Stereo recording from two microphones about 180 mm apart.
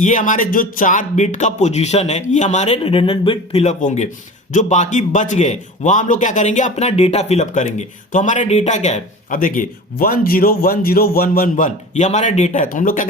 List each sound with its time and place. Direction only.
0.0 s a man's voice: 45° left (ahead or behind)